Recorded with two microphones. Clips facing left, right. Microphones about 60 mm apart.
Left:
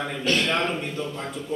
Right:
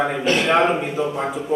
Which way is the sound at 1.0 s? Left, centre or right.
Right.